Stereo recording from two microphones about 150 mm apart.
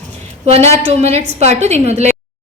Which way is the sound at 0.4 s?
45° right (ahead or behind).